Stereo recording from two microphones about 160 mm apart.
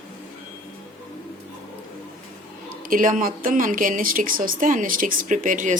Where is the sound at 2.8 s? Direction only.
60° right (ahead or behind).